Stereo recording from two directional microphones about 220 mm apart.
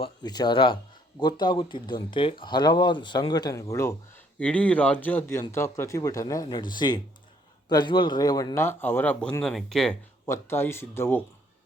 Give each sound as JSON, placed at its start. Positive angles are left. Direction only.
{"t": 0.0, "sound": "speech", "side_deg": 20}